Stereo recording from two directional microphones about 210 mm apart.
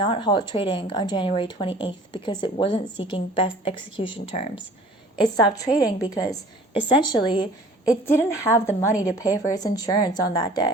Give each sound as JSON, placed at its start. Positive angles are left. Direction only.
{"t": 0.0, "sound": "speech", "side_deg": 20}
{"t": 5.5, "sound": "a woman's voice", "side_deg": 15}